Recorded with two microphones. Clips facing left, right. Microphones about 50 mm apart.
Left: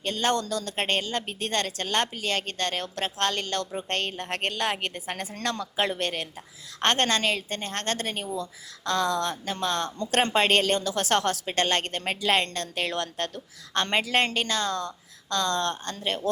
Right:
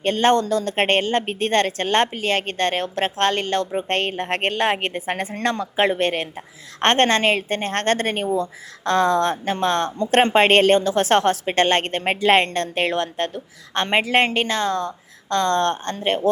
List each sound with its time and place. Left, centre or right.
0.0 s a woman's voice: right